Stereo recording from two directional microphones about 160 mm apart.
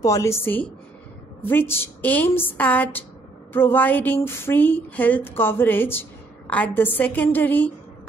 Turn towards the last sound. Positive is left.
turn(degrees=10)  # may be behind; listen again after turning